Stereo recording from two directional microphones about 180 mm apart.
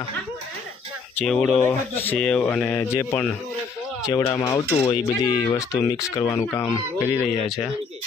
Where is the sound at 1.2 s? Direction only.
5° left (ahead or behind).